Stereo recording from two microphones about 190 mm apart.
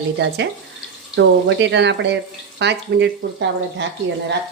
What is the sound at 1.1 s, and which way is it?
Frying, 70° right (ahead or behind).